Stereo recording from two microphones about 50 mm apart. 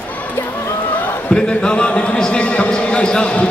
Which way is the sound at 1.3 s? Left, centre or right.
Centre.